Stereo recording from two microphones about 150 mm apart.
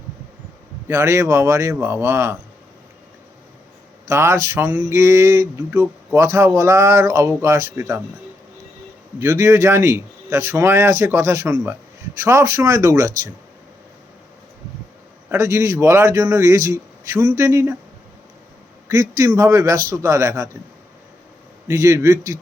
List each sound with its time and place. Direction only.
0.9 s speech: 20° right (ahead or behind)
4.1 s a man's voice: 20° right (ahead or behind)
9.1 s speech: 20° right (ahead or behind)
15.3 s speech: 20° right (ahead or behind)
18.9 s speech: 20° right (ahead or behind)
21.7 s speech: 20° right (ahead or behind)